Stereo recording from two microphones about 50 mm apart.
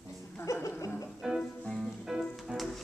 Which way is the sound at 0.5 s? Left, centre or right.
Left.